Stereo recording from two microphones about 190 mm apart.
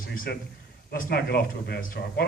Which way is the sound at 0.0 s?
50° left (ahead or behind).